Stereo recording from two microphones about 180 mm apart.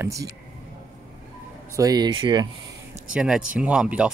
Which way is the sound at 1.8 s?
20° right (ahead or behind).